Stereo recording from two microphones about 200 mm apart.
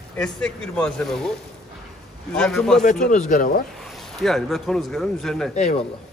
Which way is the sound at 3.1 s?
40° left (ahead or behind).